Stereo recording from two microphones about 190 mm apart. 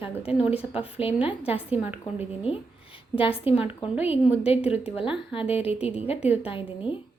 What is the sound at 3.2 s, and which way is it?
A woman's voice, 30° left (ahead or behind).